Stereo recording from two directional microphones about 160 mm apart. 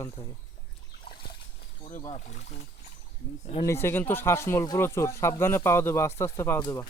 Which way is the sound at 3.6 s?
15° left (ahead or behind).